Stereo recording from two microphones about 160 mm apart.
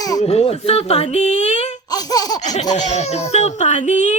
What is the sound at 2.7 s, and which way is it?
A woman's voice, 45° left (ahead or behind).